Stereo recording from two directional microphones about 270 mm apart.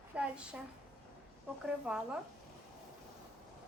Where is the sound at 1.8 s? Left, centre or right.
Centre.